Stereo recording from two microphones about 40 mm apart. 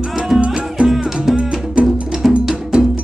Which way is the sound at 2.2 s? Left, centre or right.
Centre.